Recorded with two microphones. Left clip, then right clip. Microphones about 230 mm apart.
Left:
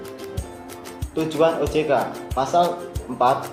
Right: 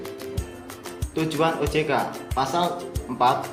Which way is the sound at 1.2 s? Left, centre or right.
Right.